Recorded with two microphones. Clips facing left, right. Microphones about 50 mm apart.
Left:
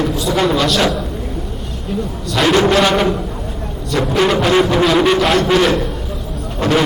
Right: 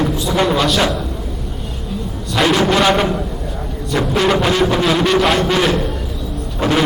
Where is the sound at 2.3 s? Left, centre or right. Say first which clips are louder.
Left 2 dB; centre.